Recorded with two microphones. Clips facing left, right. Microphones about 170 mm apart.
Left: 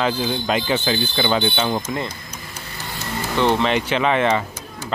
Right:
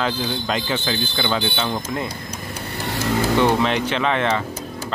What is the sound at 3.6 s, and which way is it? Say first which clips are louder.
Speech: left 1 dB; 5° left (ahead or behind).